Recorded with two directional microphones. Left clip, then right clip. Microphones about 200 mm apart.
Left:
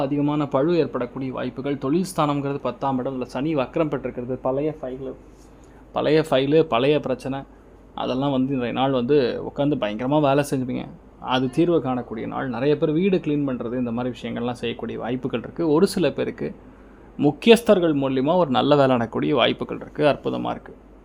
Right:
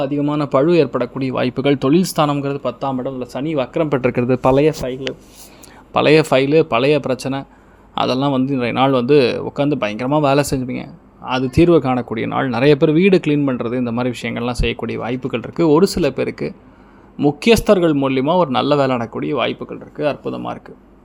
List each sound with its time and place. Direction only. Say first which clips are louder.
0.0 s speech: right 4 dB; 5° right (ahead or behind)
4.0 s speech: right 11 dB; 50° right (ahead or behind)
5.9 s speech: right 7 dB; 20° right (ahead or behind)
15.5 s speech: right 7 dB; 20° right (ahead or behind)
15.8 s speech: right 4 dB; 10° right (ahead or behind)